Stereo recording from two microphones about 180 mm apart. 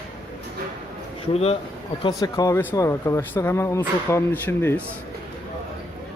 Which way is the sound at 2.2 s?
20° left (ahead or behind).